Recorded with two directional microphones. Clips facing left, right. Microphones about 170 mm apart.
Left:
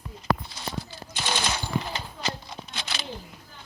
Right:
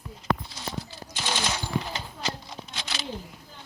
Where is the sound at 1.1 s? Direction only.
60° left (ahead or behind).